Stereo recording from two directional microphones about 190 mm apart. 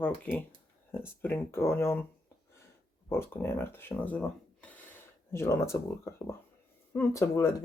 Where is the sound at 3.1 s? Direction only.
10° left (ahead or behind).